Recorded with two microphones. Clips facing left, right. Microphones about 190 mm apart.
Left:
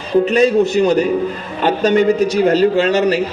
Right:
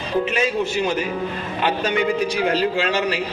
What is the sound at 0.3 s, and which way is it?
A woman's voice, 40° left (ahead or behind).